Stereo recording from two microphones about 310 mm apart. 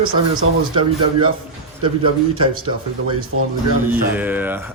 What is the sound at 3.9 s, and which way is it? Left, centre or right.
Speech, centre.